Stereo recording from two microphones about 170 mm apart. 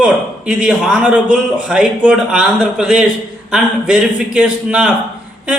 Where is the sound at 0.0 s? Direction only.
5° right (ahead or behind).